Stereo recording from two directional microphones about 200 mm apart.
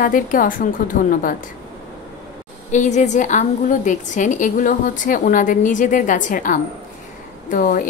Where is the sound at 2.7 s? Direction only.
35° left (ahead or behind).